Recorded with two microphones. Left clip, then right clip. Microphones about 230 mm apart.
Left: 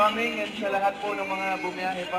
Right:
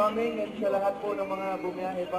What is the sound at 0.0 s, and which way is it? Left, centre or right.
Speech, centre.